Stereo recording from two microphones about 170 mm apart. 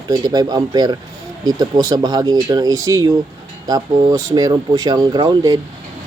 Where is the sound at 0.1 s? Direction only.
25° right (ahead or behind).